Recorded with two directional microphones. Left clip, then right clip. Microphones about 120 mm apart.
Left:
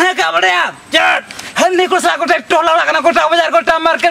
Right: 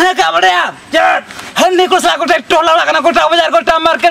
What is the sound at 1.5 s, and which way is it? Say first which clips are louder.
A man's voice: right 2 dB; 5° right (ahead or behind).